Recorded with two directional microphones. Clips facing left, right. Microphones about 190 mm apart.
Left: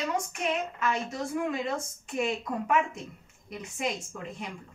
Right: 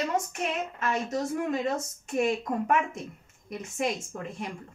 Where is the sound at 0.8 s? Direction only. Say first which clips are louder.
Right 2 dB; 40° right (ahead or behind).